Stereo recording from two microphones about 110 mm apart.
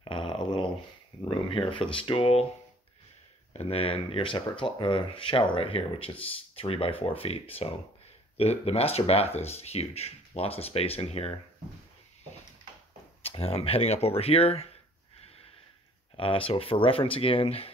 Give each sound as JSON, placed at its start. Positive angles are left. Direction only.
{"t": 0.0, "sound": "a sound", "side_deg": 50}
{"t": 1.2, "sound": "speech", "side_deg": 50}
{"t": 3.5, "sound": "speech", "side_deg": 60}
{"t": 13.2, "sound": "speech", "side_deg": 60}
{"t": 16.2, "sound": "speech", "side_deg": 55}